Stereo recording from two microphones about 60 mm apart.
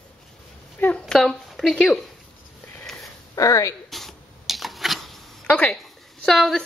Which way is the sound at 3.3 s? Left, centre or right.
Left.